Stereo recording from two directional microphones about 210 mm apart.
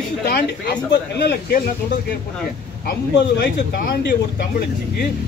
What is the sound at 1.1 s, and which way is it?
Speech, 50° left (ahead or behind).